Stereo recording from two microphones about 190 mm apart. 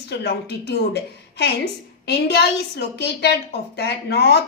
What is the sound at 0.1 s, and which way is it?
A woman's voice, 60° left (ahead or behind).